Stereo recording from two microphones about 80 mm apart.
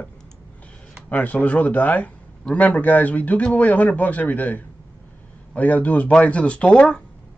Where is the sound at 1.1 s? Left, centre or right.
Centre.